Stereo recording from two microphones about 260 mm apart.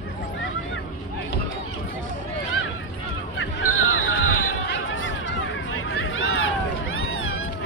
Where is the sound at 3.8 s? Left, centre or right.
Left.